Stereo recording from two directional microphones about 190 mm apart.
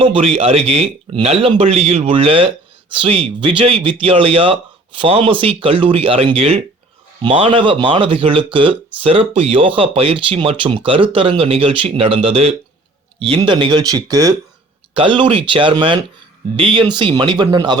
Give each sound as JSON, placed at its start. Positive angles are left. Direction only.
{"t": 0.0, "sound": "a man's voice", "side_deg": -30}